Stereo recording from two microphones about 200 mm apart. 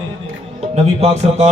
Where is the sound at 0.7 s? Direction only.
30° right (ahead or behind).